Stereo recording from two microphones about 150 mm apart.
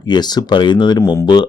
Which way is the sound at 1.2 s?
30° left (ahead or behind).